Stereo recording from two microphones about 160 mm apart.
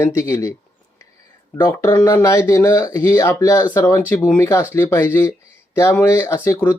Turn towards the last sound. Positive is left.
turn(degrees=15)  # may be behind; listen again after turning